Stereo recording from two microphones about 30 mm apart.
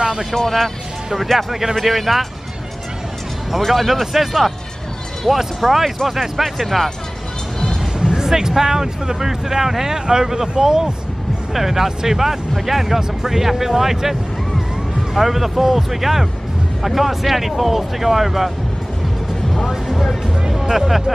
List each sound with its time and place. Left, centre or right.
0.3 s speech: centre
1.5 s speech: centre
1.8 s speech: centre
3.7 s speech: centre
8.0 s speech: right
11.5 s speech: centre
15.1 s speech: centre
20.7 s speech: centre